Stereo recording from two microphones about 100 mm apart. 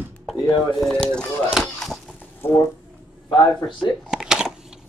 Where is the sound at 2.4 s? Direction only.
25° left (ahead or behind).